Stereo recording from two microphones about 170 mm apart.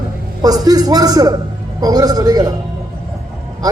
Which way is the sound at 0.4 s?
20° right (ahead or behind).